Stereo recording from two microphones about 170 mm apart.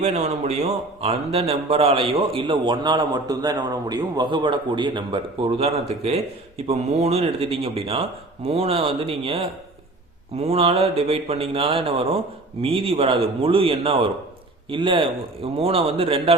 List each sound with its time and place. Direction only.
0.0 s a man's voice: 40° right (ahead or behind)